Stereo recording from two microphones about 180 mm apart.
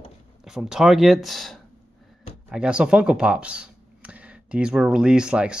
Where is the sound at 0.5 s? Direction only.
5° right (ahead or behind).